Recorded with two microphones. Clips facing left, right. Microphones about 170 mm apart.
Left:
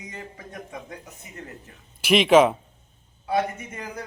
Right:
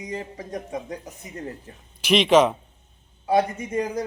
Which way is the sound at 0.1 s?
30° right (ahead or behind).